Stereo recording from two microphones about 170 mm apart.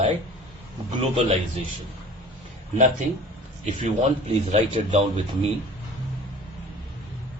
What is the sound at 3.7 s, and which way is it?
Speech, 45° right (ahead or behind).